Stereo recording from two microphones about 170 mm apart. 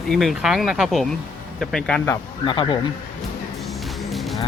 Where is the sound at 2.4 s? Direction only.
30° left (ahead or behind).